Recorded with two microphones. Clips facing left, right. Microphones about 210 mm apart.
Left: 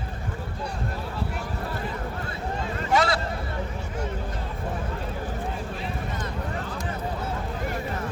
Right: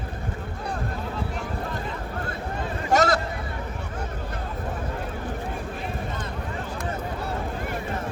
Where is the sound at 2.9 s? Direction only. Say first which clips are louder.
Right 2 dB; 45° right (ahead or behind).